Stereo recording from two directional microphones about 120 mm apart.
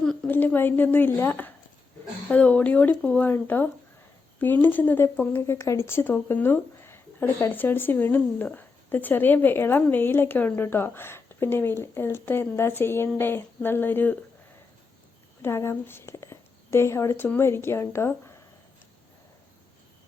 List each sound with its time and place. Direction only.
0.3 s speech: 15° left (ahead or behind)
15.4 s a woman's voice: 20° left (ahead or behind)